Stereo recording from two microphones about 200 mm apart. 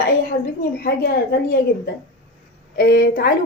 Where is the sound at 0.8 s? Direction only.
50° left (ahead or behind).